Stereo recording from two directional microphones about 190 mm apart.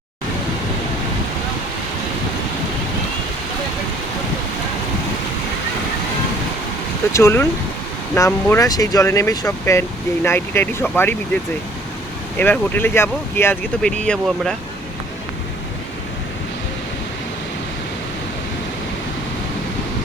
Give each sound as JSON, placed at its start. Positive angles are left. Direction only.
{"t": 7.1, "sound": "speech", "side_deg": 15}
{"t": 12.4, "sound": "speech", "side_deg": 10}